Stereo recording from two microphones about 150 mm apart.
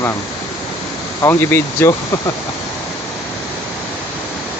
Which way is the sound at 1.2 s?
15° left (ahead or behind).